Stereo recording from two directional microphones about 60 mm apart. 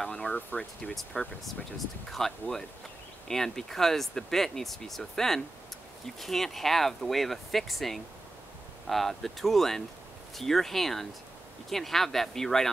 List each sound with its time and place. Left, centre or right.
0.1 s speech: centre
1.4 s speech: centre